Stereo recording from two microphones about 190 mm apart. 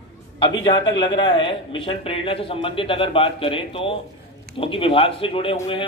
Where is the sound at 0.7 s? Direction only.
25° left (ahead or behind).